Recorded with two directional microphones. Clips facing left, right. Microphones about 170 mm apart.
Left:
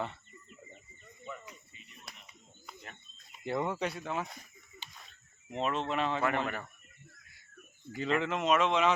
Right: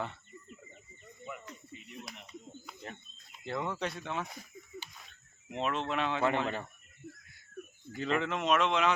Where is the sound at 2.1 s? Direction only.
Centre (ahead or behind).